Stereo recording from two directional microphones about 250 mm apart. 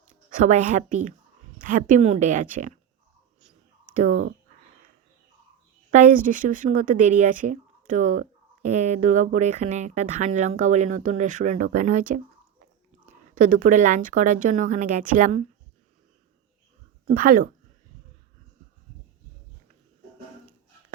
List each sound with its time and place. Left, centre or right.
0.3 s speech: right
3.9 s speech: right
5.9 s speech: right
13.3 s speech: right
17.2 s speech: right